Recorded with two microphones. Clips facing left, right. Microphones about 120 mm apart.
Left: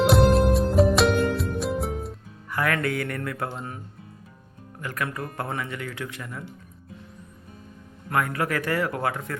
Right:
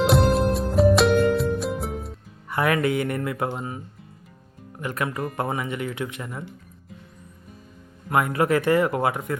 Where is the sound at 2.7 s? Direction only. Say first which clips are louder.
Right 4 dB; 20° right (ahead or behind).